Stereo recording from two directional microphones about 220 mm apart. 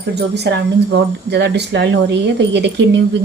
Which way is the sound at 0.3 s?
50° right (ahead or behind).